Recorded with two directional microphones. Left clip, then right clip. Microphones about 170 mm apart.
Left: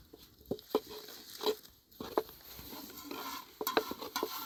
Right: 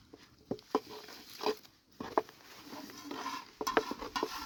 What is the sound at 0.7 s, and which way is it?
Pig, 10° right (ahead or behind).